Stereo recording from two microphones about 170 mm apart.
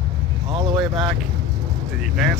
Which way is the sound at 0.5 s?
25° right (ahead or behind).